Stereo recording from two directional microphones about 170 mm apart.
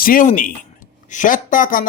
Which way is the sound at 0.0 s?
55° left (ahead or behind).